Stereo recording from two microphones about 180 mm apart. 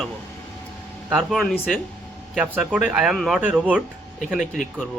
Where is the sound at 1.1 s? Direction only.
Centre (ahead or behind).